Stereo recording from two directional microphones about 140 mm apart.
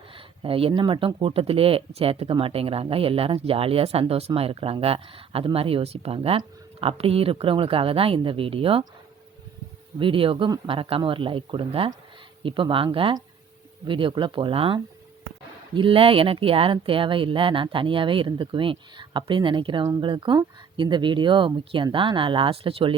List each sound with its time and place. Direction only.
0.1 s speech: 40° right (ahead or behind)
10.0 s speech: 40° right (ahead or behind)